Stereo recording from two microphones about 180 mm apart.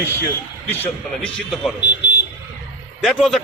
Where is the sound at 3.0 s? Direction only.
5° left (ahead or behind).